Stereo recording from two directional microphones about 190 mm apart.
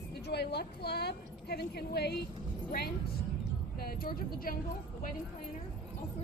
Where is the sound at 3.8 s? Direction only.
50° left (ahead or behind).